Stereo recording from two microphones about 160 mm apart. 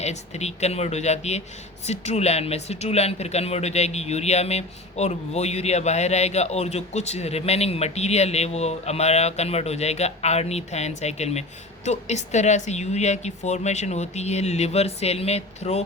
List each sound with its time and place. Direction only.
0.0 s speech: 45° left (ahead or behind)